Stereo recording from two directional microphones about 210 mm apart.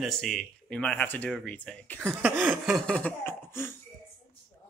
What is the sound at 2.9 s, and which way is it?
Cough, 5° left (ahead or behind).